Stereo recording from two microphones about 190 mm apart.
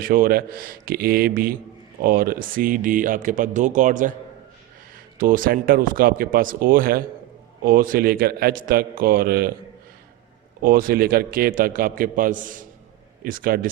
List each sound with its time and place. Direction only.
0.0 s speech: 50° right (ahead or behind)
5.1 s speech: 45° right (ahead or behind)
10.6 s speech: 50° right (ahead or behind)